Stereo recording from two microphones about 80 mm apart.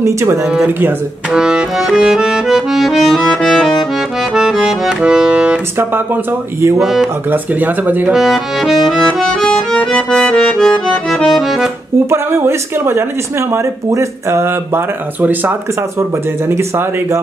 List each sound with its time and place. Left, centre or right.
0.0 s speech: right
1.3 s accordion: centre
4.4 s accordion: centre
6.8 s music: centre
7.2 s speech: right
8.1 s music: centre
9.0 s music: centre
9.9 s accordion: centre
10.3 s music: centre
12.1 s speech: right
16.0 s speech: right